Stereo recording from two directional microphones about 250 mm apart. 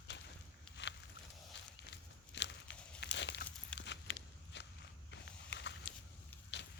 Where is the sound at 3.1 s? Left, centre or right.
Left.